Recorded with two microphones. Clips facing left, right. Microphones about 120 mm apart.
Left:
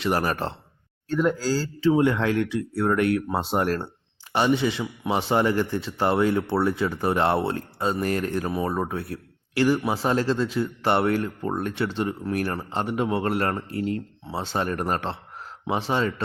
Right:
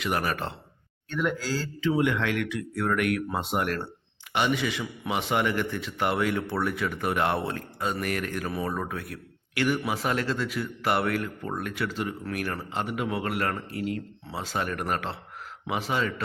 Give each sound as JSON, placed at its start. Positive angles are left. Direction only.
{"t": 0.0, "sound": "a man's voice", "side_deg": 35}